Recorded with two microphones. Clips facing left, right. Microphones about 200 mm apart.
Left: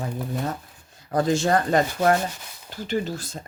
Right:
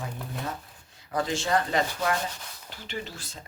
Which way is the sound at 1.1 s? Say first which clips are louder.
Left 6 dB; 45° left (ahead or behind).